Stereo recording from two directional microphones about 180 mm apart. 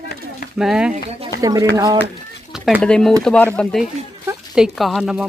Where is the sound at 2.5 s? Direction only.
5° right (ahead or behind).